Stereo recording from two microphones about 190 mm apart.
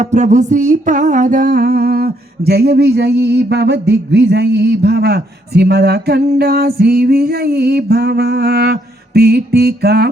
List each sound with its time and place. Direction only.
0.0 s music: 40° right (ahead or behind); by 10.1 s 55° right (ahead or behind)